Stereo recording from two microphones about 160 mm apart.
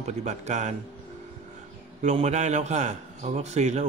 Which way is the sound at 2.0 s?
45° right (ahead or behind).